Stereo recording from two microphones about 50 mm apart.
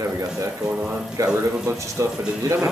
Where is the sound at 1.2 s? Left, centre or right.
Right.